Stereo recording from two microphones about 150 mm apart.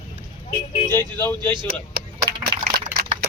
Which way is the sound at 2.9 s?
15° right (ahead or behind).